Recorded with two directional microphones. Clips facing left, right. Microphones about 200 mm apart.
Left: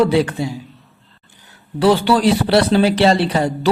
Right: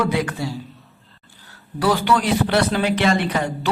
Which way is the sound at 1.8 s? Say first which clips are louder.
Left 5 dB; 30° left (ahead or behind).